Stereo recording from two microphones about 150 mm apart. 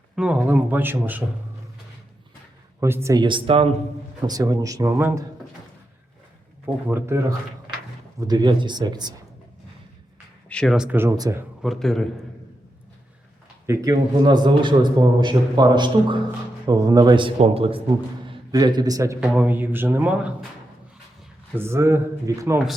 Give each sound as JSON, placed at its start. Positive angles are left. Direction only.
{"t": 0.2, "sound": "speech", "side_deg": -5}
{"t": 2.8, "sound": "a man's voice", "side_deg": -20}
{"t": 4.3, "sound": "a man's voice", "side_deg": -25}
{"t": 6.8, "sound": "speech", "side_deg": -15}
{"t": 8.2, "sound": "a man's voice", "side_deg": -25}
{"t": 10.5, "sound": "speech", "side_deg": 5}
{"t": 10.8, "sound": "a man's voice", "side_deg": -10}
{"t": 11.6, "sound": "a man's voice", "side_deg": 0}
{"t": 13.7, "sound": "a man's voice", "side_deg": -25}
{"t": 18.5, "sound": "a man's voice", "side_deg": -25}
{"t": 19.2, "sound": "speech", "side_deg": -10}
{"t": 21.5, "sound": "speech", "side_deg": -15}